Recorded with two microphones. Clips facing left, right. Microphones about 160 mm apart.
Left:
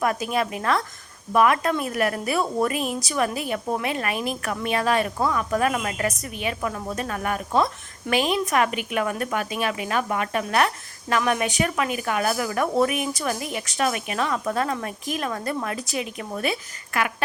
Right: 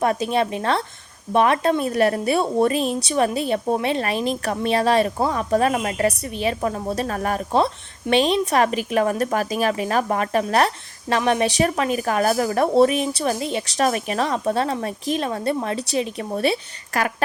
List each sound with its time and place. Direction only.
0.0 s a woman's voice: 30° right (ahead or behind)